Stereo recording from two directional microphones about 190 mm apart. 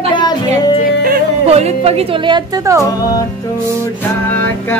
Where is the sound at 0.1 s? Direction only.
25° left (ahead or behind).